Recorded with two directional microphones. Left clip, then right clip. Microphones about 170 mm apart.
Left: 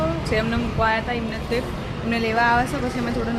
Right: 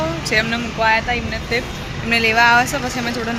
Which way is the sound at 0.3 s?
Centre (ahead or behind).